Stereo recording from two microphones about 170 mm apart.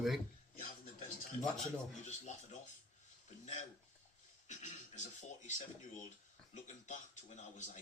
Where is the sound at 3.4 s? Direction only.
45° left (ahead or behind).